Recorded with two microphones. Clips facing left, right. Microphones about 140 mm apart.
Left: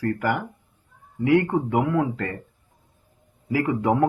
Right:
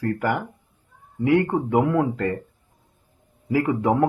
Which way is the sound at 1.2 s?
20° right (ahead or behind).